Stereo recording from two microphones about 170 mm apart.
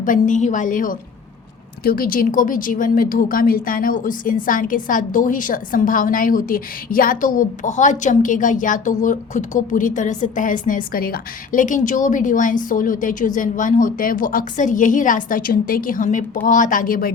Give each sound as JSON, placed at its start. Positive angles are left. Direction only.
{"t": 0.0, "sound": "a woman's voice", "side_deg": 50}